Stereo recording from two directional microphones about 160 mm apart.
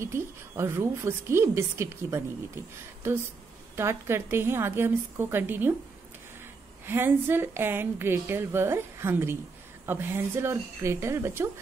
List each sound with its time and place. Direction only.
0.0 s a woman's voice: 15° right (ahead or behind)
6.9 s a woman's voice: 15° right (ahead or behind)